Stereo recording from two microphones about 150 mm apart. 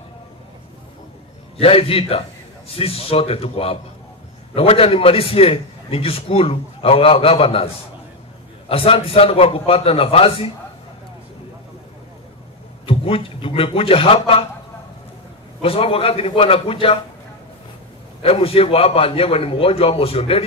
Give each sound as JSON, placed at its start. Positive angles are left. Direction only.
{"t": 1.6, "sound": "a man's voice", "side_deg": 40}
{"t": 12.8, "sound": "a man's voice", "side_deg": 40}
{"t": 15.6, "sound": "a man's voice", "side_deg": 40}
{"t": 18.2, "sound": "a man's voice", "side_deg": 40}